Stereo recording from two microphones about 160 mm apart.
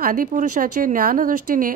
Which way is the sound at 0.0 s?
55° right (ahead or behind).